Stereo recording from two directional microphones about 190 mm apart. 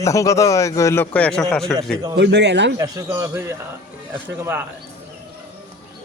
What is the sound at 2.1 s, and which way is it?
Speech, 65° right (ahead or behind).